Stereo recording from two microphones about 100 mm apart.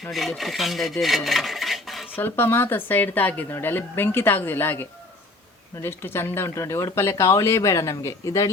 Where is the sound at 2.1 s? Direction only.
20° left (ahead or behind).